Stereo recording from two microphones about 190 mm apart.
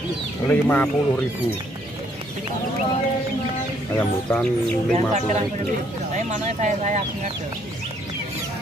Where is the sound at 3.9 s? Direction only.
5° left (ahead or behind).